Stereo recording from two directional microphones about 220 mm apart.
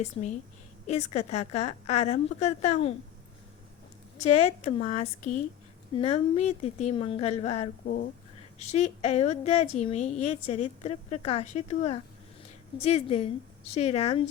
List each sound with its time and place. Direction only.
0.0 s a woman's voice: 35° left (ahead or behind)
4.2 s a woman's voice: 30° left (ahead or behind)